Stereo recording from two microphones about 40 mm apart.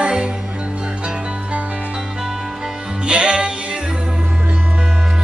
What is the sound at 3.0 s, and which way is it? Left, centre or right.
Music, right.